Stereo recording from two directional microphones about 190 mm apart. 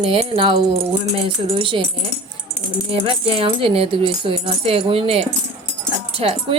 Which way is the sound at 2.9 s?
30° right (ahead or behind).